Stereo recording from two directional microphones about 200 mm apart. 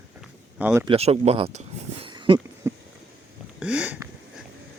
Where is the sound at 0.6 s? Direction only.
10° right (ahead or behind).